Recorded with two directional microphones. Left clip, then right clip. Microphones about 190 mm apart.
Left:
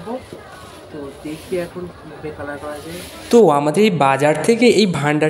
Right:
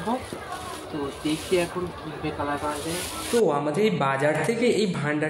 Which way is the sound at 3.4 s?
50° left (ahead or behind).